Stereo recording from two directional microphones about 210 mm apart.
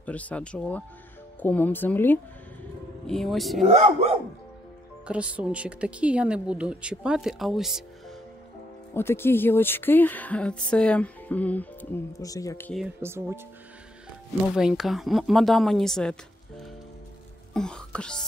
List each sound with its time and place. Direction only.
0.0 s speech: 5° left (ahead or behind)
3.6 s speech: 30° right (ahead or behind)
5.0 s speech: 5° right (ahead or behind)
8.9 s speech: 10° left (ahead or behind)
12.7 s speech: 10° right (ahead or behind)
14.5 s speech: 5° right (ahead or behind)